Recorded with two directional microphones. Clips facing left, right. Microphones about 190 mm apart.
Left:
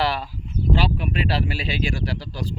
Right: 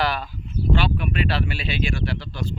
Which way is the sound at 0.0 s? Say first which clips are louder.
Left 1 dB; 25° left (ahead or behind).